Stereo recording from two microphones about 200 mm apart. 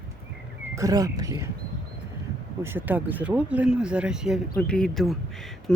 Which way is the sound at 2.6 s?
10° right (ahead or behind).